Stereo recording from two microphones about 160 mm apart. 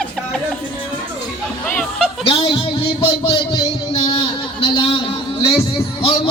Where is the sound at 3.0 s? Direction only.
30° left (ahead or behind).